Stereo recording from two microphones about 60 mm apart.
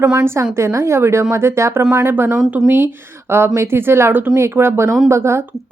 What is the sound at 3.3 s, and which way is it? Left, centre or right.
Speech, right.